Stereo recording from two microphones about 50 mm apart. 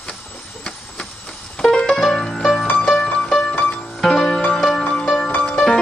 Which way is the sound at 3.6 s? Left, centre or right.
Centre.